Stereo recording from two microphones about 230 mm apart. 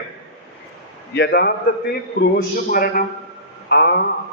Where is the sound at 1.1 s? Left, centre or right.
Left.